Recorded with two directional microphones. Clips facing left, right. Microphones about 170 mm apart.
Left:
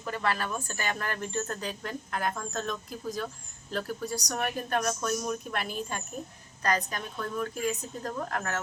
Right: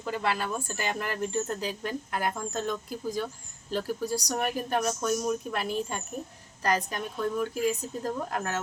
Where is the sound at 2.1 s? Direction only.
20° right (ahead or behind).